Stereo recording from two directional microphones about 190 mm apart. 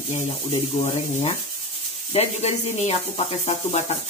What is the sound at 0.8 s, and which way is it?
Speech, 40° left (ahead or behind).